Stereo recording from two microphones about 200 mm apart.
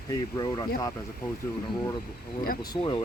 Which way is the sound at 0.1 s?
20° left (ahead or behind).